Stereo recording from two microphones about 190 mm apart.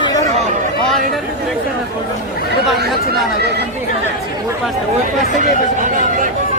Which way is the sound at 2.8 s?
Centre (ahead or behind).